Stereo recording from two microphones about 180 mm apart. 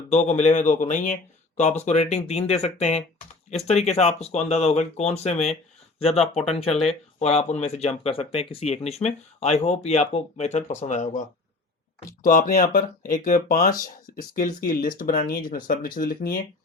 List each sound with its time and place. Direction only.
0.1 s speech: 40° left (ahead or behind)